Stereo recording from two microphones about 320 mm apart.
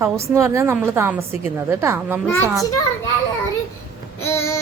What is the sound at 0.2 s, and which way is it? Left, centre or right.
A woman's voice, centre.